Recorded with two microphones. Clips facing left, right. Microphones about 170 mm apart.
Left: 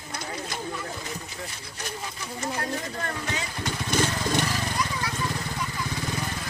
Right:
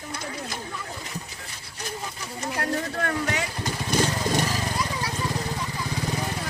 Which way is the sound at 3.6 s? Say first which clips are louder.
Right 1 dB; 35° right (ahead or behind).